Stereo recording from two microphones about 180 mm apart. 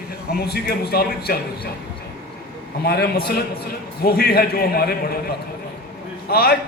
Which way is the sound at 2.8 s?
60° left (ahead or behind).